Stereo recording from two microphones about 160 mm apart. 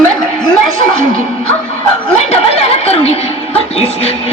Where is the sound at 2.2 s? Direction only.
40° left (ahead or behind).